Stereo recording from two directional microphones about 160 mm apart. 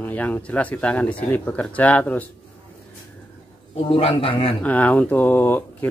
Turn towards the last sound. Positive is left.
turn(degrees=10)  # may be behind; listen again after turning